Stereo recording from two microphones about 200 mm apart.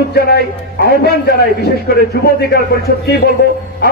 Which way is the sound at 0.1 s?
55° left (ahead or behind).